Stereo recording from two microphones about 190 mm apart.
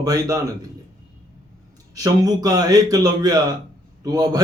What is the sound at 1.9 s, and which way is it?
A man's voice, 20° right (ahead or behind).